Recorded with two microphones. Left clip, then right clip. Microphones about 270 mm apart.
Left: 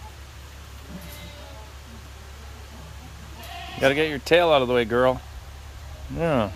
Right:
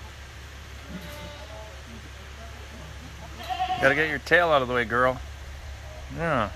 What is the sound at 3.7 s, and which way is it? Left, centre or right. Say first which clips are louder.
Speech: left 3 dB; left.